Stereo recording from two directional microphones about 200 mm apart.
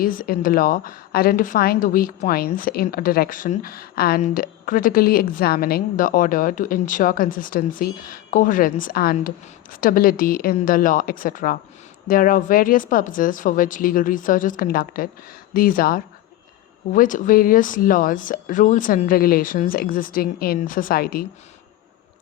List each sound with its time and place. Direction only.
0.0 s a woman's voice: 45° left (ahead or behind)